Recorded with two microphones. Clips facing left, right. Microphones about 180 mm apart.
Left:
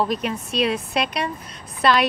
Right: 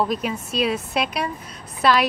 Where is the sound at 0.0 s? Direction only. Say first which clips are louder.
Even; centre (ahead or behind).